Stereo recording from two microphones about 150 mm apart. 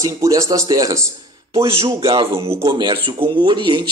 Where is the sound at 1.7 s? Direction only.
35° right (ahead or behind); by 2.7 s 20° right (ahead or behind).